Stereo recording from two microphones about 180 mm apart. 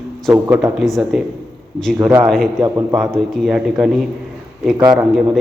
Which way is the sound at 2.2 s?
Centre (ahead or behind).